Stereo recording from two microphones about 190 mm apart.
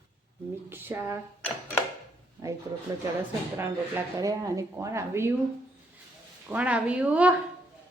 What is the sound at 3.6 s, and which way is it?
Speech, 15° right (ahead or behind).